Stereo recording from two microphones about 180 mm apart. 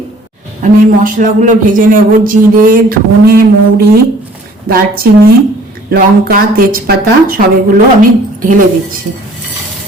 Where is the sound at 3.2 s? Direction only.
55° right (ahead or behind).